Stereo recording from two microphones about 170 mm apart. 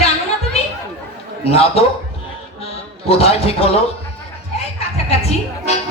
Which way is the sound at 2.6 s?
35° left (ahead or behind).